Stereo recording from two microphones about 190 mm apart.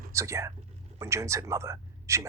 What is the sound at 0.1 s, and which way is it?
Speech, 15° right (ahead or behind).